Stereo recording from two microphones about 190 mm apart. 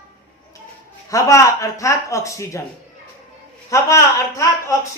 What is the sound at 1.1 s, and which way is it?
A man's voice, 15° left (ahead or behind).